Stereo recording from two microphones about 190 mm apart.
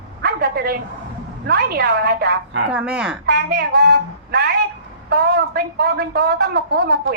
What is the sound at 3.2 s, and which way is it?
Speech, 55° right (ahead or behind).